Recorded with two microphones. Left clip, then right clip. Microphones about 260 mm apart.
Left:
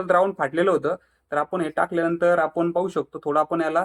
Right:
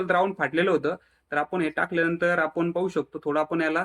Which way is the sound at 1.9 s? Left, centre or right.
Centre.